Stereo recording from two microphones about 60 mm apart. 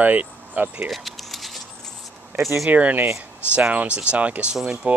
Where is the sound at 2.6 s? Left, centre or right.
Right.